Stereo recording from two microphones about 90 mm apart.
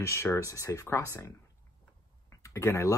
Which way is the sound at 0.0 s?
30° left (ahead or behind).